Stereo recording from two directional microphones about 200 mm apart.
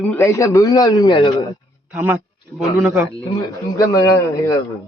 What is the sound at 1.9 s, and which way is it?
A man's voice, 10° right (ahead or behind).